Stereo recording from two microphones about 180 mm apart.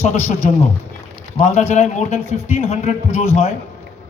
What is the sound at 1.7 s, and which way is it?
A man's voice, 40° left (ahead or behind).